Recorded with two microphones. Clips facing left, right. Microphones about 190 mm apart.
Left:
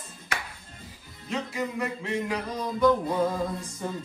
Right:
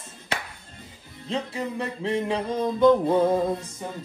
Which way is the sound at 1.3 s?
30° right (ahead or behind).